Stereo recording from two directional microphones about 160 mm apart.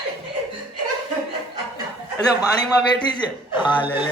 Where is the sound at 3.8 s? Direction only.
30° left (ahead or behind).